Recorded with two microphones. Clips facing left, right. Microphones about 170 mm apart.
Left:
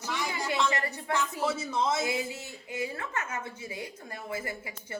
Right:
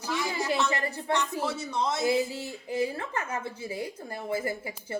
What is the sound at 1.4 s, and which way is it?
Speech, centre (ahead or behind).